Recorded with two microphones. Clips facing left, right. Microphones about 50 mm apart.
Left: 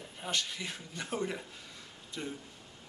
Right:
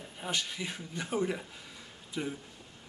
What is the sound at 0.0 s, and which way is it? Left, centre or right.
A man's voice, centre.